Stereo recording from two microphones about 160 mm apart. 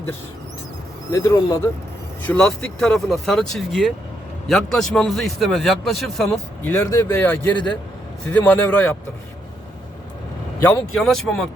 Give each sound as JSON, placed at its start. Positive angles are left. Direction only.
{"t": 1.1, "sound": "speech", "side_deg": 20}
{"t": 2.2, "sound": "a man's voice", "side_deg": 5}
{"t": 6.2, "sound": "speech", "side_deg": 10}
{"t": 10.6, "sound": "a man's voice", "side_deg": 5}